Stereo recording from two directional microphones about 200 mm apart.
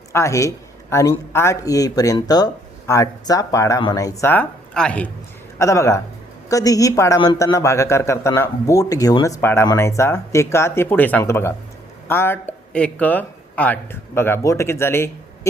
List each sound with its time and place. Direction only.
0.1 s speech: 15° left (ahead or behind)